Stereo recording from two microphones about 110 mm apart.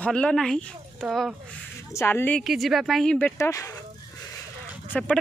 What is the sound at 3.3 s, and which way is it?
Speech, 25° left (ahead or behind).